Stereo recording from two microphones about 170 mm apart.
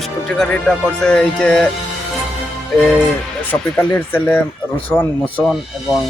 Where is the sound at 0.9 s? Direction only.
5° left (ahead or behind).